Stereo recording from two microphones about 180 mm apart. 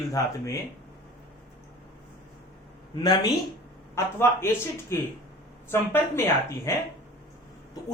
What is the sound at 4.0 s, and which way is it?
A man's voice, 15° left (ahead or behind).